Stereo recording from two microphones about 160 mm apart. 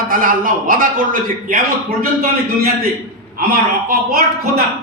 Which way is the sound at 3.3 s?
65° right (ahead or behind).